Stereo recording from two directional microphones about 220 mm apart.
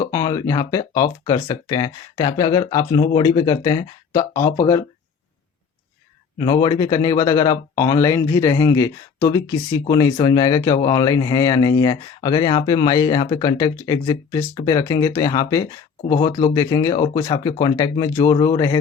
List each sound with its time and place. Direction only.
0.0 s speech: 15° left (ahead or behind)
6.4 s speech: 20° left (ahead or behind)